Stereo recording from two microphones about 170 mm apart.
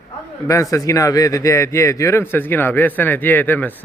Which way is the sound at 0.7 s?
20° left (ahead or behind).